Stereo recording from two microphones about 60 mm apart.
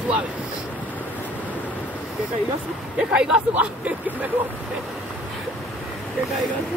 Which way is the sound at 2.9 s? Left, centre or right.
Centre.